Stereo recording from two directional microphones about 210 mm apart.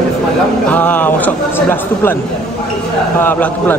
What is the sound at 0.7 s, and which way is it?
A man's voice, 10° left (ahead or behind).